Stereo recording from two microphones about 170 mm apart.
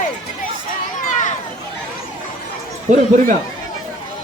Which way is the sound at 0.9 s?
45° left (ahead or behind).